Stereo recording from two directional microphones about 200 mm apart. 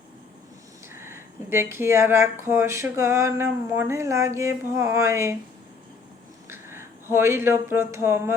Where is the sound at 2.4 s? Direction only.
10° right (ahead or behind).